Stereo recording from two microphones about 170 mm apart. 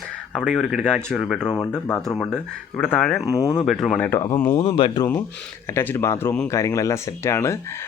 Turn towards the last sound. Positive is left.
turn(degrees=15)  # may be behind; listen again after turning